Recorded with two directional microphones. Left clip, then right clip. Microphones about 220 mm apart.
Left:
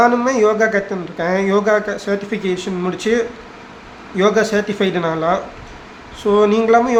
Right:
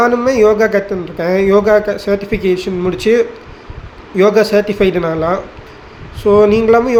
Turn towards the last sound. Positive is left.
turn(degrees=-5)  # may be behind; listen again after turning